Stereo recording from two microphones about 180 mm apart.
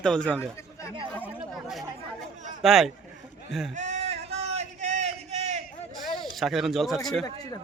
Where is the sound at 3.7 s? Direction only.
40° right (ahead or behind).